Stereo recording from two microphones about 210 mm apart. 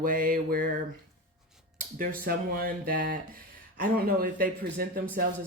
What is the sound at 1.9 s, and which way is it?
Speech, 45° right (ahead or behind).